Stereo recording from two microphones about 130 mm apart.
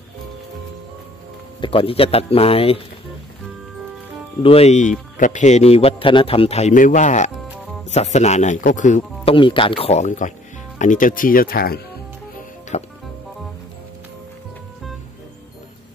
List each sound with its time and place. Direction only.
1.6 s a man's voice: 45° left (ahead or behind)
4.4 s speech: 50° left (ahead or behind)
5.1 s a man's voice: 80° left; by 6.7 s 50° left (ahead or behind)
6.7 s speech: 80° left
7.9 s speech: 60° left (ahead or behind)
9.2 s a man's voice: 45° left (ahead or behind); by 11.5 s 90° left
12.7 s music: 60° left (ahead or behind)